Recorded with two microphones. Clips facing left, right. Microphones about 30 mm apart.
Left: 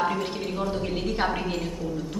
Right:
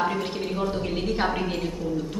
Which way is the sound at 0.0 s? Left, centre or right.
Centre.